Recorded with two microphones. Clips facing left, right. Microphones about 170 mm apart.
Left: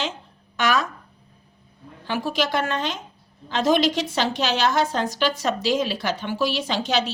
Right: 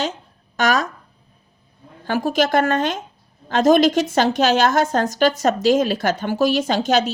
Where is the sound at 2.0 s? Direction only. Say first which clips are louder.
Right 5 dB; 45° right (ahead or behind).